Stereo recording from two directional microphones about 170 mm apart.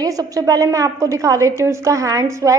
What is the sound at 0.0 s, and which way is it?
A woman's voice, 20° right (ahead or behind).